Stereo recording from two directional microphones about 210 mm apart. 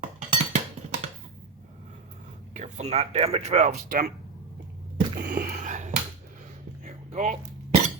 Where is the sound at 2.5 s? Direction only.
35° right (ahead or behind).